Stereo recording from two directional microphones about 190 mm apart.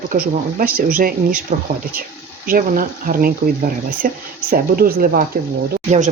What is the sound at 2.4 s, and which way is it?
Speech, 45° right (ahead or behind).